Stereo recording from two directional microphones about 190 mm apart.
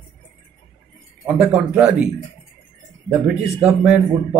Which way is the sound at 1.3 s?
5° right (ahead or behind).